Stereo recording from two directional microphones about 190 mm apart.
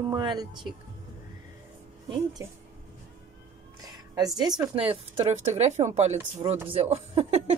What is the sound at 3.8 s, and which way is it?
Speech, 20° right (ahead or behind).